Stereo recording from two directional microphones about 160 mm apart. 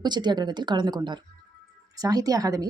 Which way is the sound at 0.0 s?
25° right (ahead or behind).